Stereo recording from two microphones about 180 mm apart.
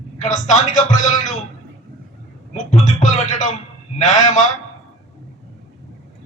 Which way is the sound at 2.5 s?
40° left (ahead or behind).